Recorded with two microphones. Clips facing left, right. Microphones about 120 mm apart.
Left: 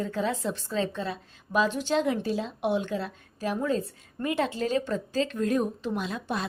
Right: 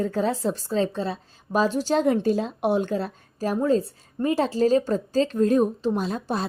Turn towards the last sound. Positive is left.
turn(degrees=-35)  # may be behind; listen again after turning